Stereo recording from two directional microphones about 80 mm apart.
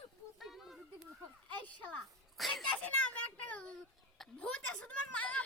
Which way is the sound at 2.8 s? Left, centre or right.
Centre.